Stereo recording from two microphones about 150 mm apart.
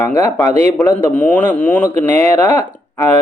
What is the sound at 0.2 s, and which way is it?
Speech, 20° left (ahead or behind).